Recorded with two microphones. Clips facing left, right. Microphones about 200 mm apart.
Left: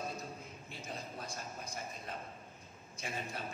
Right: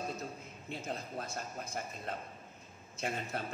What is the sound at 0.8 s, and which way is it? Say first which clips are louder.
A man's voice: right 3 dB; 55° right (ahead or behind).